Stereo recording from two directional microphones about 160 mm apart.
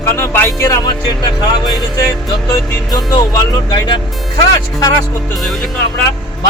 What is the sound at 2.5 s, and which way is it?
Speech, 25° left (ahead or behind).